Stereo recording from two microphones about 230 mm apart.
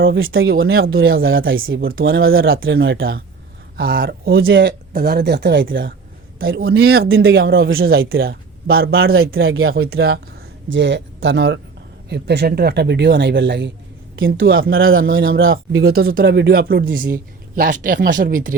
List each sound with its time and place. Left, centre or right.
0.0 s speech: right
1.4 s speech: right
2.0 s speech: right
3.8 s speech: right
4.4 s speech: right
4.9 s speech: right
9.3 s speech: right
9.9 s speech: right
15.5 s speech: right